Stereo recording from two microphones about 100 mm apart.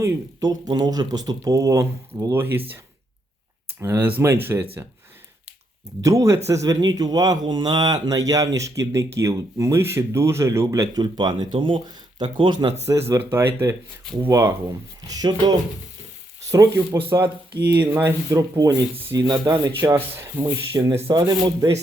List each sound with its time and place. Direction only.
0.0 s speech: 30° right (ahead or behind)
6.0 s speech: 30° right (ahead or behind); by 12.7 s 50° right (ahead or behind)
12.9 s speech: 30° right (ahead or behind)
15.0 s speech: 40° right (ahead or behind)
17.0 s speech: 20° right (ahead or behind); by 21.8 s 40° right (ahead or behind)